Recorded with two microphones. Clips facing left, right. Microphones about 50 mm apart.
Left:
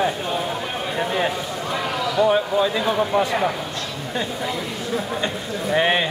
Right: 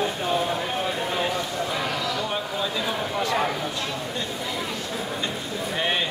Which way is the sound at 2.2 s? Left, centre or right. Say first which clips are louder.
Left 9 dB; left.